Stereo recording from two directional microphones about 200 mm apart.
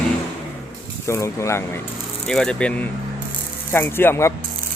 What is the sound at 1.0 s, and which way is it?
Speech, 15° left (ahead or behind).